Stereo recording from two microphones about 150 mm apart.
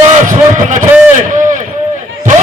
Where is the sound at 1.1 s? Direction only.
55° right (ahead or behind).